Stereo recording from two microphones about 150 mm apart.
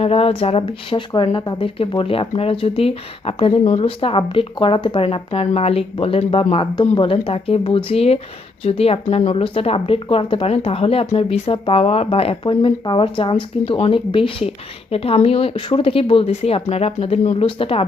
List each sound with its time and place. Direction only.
0.0 s speech: 40° left (ahead or behind)